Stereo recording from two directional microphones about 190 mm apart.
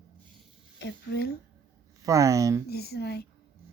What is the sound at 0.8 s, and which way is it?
Speech, 65° left (ahead or behind).